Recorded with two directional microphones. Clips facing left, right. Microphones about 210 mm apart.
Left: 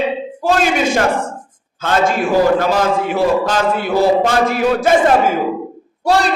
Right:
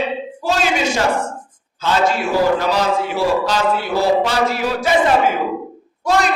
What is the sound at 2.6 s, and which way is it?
A man's voice, 50° left (ahead or behind).